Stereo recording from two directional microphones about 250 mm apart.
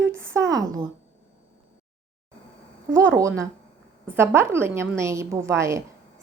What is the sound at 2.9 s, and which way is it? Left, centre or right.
A woman's voice, centre.